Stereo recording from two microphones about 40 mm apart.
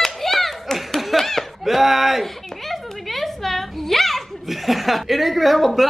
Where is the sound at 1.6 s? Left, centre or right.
Centre.